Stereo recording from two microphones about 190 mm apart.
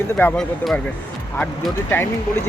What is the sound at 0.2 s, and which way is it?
Speech, 5° left (ahead or behind).